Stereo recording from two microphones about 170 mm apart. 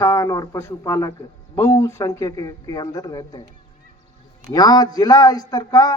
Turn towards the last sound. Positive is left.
turn(degrees=20)  # may be behind; listen again after turning